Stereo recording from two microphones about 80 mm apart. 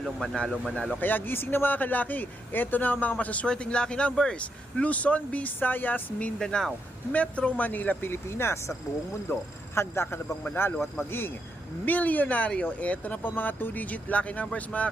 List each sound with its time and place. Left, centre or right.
0.0 s speech: centre
0.9 s a man's voice: left
11.9 s a man's voice: left